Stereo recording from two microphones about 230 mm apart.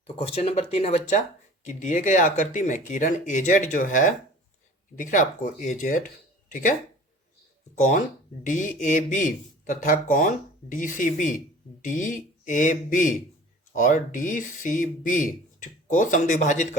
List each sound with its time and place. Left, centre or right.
0.2 s speech: left
7.8 s speech: left